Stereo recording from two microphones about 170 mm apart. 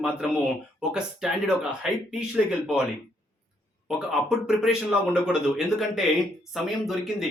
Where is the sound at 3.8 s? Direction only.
5° right (ahead or behind).